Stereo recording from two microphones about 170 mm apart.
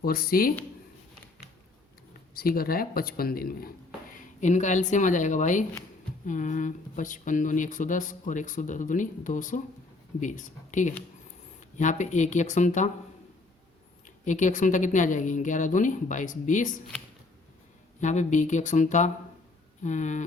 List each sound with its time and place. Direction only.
0.0 s speech: 60° left (ahead or behind)
2.3 s speech: 60° left (ahead or behind)
4.1 s speech: 45° left (ahead or behind)
14.3 s speech: 45° left (ahead or behind)
18.0 s speech: 45° left (ahead or behind)